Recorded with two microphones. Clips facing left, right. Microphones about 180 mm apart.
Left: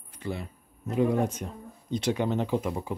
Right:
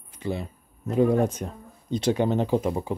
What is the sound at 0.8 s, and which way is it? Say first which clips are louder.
Speech: right 4 dB; 40° right (ahead or behind).